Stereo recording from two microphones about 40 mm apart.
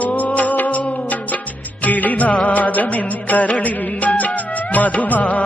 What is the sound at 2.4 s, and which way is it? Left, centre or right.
Music of bollywood, left.